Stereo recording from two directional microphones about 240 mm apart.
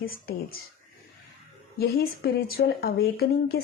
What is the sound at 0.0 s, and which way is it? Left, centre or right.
Speech, left.